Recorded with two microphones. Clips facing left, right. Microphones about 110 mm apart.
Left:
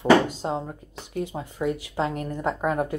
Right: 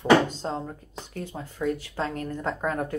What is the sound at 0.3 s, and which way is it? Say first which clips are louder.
Speech: left 3 dB; 10° left (ahead or behind).